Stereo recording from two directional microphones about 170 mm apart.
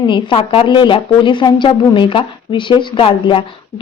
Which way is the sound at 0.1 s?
30° left (ahead or behind).